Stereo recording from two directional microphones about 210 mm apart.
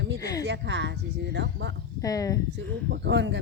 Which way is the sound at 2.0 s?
15° left (ahead or behind).